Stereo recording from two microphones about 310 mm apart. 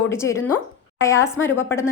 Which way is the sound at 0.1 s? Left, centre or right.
Centre.